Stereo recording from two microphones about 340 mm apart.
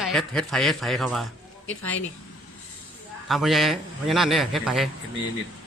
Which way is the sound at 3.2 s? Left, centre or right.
Centre.